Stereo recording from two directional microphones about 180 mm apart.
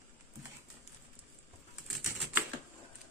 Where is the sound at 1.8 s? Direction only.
Centre (ahead or behind).